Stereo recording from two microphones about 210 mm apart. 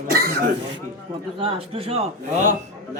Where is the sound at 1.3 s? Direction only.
25° right (ahead or behind).